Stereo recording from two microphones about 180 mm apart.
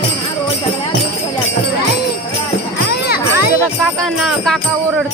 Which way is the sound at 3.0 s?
60° left (ahead or behind).